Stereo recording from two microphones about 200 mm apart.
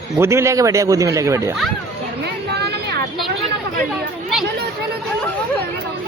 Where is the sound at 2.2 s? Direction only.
55° right (ahead or behind).